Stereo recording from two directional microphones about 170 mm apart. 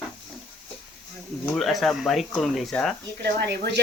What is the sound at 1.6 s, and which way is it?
Speech, centre (ahead or behind).